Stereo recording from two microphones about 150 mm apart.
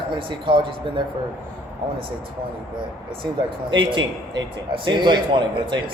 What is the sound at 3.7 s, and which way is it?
A man's voice, 30° right (ahead or behind).